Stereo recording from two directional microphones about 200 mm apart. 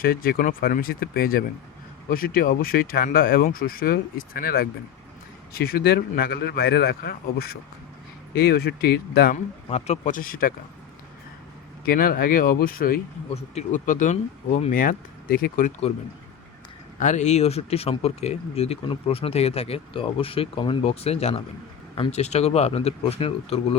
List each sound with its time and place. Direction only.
0.0 s speech: 45° left (ahead or behind)
9.6 s speech: 35° left (ahead or behind)
11.9 s speech: 45° left (ahead or behind)
13.3 s speech: 35° left (ahead or behind)
17.0 s speech: 35° left (ahead or behind)